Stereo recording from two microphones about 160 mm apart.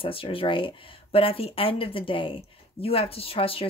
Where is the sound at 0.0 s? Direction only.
35° left (ahead or behind).